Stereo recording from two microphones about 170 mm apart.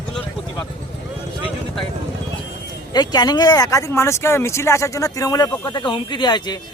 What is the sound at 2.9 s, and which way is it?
A man's voice, 25° left (ahead or behind).